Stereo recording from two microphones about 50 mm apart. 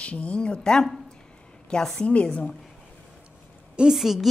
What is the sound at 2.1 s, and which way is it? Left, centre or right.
Speech, left.